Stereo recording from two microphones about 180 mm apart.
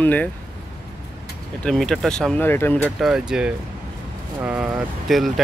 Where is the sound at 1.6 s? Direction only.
5° left (ahead or behind).